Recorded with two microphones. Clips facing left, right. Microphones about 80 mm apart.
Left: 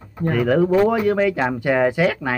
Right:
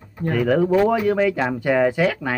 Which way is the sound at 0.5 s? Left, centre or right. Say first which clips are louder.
Left 1 dB; centre.